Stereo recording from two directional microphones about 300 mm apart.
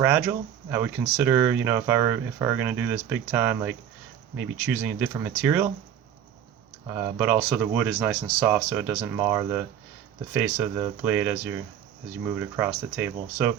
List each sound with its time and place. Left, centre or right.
0.0 s speech: centre
6.8 s speech: centre